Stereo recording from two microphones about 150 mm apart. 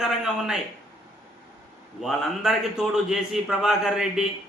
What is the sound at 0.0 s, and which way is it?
Speech, centre (ahead or behind).